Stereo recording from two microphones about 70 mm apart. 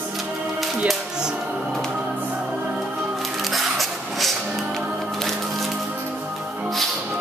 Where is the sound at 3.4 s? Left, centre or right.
Centre.